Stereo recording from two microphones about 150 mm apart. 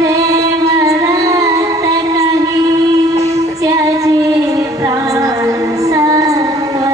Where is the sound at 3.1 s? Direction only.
45° right (ahead or behind).